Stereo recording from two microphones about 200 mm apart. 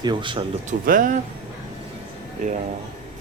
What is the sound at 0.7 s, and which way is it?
Speech, 40° right (ahead or behind).